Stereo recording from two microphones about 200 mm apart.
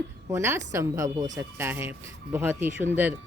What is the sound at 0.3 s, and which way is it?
A woman's voice, 15° right (ahead or behind).